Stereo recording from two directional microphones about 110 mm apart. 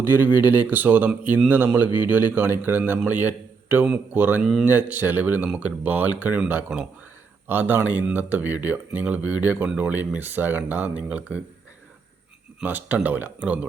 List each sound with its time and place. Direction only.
0.0 s speech: 15° right (ahead or behind)
12.6 s speech: 15° right (ahead or behind)